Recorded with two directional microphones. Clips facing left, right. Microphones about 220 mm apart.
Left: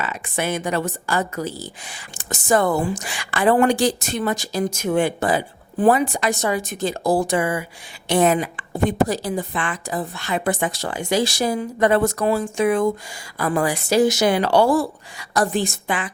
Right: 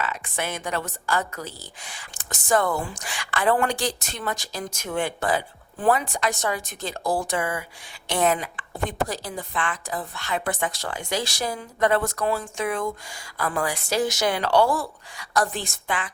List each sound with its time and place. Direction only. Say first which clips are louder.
0.0 s a woman's voice: left 4 dB; 5° left (ahead or behind)
7.0 s speech: left 6 dB; 35° left (ahead or behind)
7.3 s a woman's voice: left 6 dB; 10° left (ahead or behind)